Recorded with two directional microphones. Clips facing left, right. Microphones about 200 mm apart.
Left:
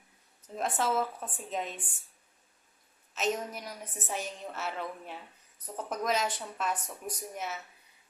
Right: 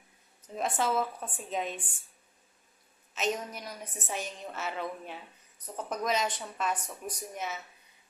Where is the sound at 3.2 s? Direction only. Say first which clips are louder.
Even; 5° left (ahead or behind).